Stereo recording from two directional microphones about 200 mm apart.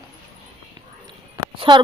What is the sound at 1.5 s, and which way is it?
Speech, 25° right (ahead or behind).